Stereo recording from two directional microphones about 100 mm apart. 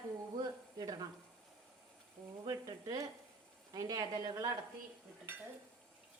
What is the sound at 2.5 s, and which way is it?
A woman's voice, 35° right (ahead or behind).